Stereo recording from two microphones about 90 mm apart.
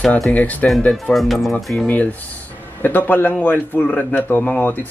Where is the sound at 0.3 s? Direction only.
15° left (ahead or behind).